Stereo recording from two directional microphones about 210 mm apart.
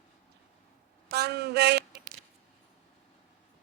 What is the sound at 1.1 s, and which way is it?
Speech, 50° right (ahead or behind).